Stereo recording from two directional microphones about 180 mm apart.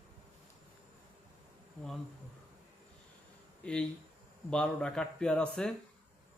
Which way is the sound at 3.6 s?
5° left (ahead or behind).